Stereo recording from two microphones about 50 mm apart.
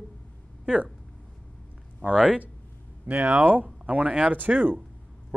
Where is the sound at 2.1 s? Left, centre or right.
Centre.